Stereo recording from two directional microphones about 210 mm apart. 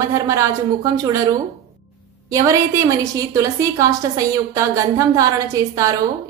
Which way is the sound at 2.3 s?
15° right (ahead or behind).